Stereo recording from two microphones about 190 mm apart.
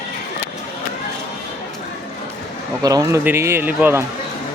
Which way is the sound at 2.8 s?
20° right (ahead or behind).